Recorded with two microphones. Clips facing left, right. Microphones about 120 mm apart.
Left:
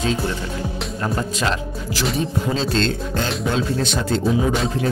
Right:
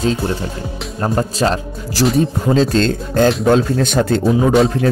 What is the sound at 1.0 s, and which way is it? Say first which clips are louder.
Speech: right 7 dB; 40° right (ahead or behind).